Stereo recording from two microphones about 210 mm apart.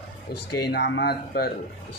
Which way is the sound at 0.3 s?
45° left (ahead or behind).